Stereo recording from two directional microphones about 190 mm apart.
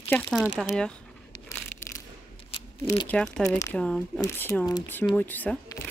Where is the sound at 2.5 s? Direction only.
30° left (ahead or behind).